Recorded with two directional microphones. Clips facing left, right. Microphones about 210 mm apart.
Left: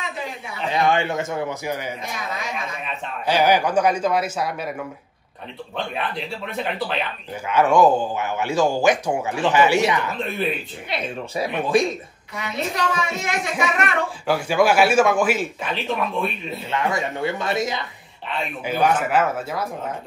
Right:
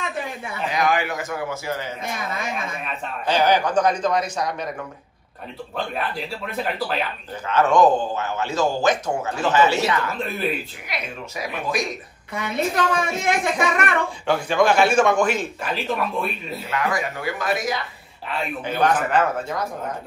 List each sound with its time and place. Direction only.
0.7 s a man's voice: 30° left (ahead or behind)
3.3 s speech: 10° left (ahead or behind)
5.9 s a man's voice: 5° right (ahead or behind)
7.4 s speech: 10° left (ahead or behind)
10.9 s a man's voice: 30° left (ahead or behind)
12.4 s a woman's voice: 55° right (ahead or behind)
14.2 s a man's voice: 5° left (ahead or behind)
16.7 s a man's voice: 25° left (ahead or behind)
18.7 s speech: 10° left (ahead or behind)